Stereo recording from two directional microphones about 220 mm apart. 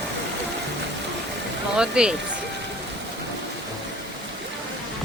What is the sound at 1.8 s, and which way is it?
Speech, 5° right (ahead or behind).